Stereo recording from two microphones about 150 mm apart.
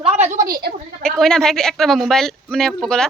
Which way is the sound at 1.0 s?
5° left (ahead or behind).